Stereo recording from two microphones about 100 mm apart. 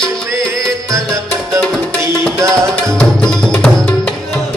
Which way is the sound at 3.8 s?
20° left (ahead or behind).